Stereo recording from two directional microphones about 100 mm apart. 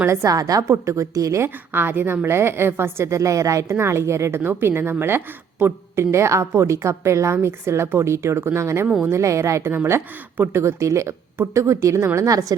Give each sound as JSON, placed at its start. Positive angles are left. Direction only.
{"t": 0.0, "sound": "a woman's voice", "side_deg": -30}
{"t": 1.7, "sound": "a woman's voice", "side_deg": -20}